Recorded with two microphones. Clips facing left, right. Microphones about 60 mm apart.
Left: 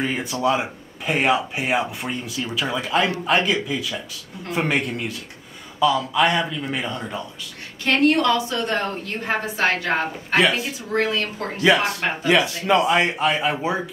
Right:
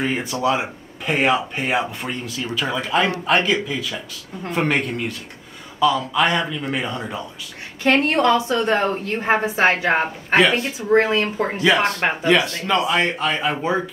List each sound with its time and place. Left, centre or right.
0.0 s speech: centre
7.8 s a woman's voice: right
10.0 s speech: centre
10.9 s a woman's voice: right
11.6 s speech: centre